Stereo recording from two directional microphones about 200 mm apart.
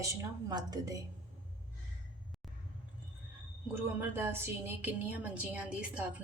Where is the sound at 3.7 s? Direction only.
10° right (ahead or behind).